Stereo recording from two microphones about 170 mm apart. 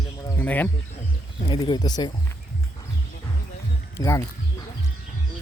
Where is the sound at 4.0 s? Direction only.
20° left (ahead or behind).